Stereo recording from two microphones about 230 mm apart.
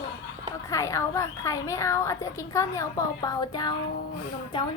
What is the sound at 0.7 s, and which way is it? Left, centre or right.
A woman's voice, centre.